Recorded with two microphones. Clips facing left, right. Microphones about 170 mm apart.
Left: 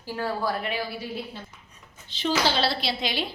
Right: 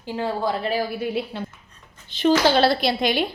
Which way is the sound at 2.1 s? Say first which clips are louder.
Right 7 dB; 50° right (ahead or behind).